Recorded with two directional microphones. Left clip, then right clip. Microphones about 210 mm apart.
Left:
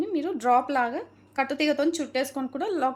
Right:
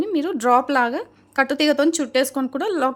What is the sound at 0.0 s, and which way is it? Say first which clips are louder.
A woman's voice: right 5 dB; 40° right (ahead or behind).